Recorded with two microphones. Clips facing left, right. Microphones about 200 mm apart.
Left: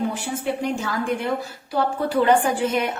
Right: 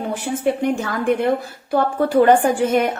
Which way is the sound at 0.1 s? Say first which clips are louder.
Right 5 dB; 55° right (ahead or behind).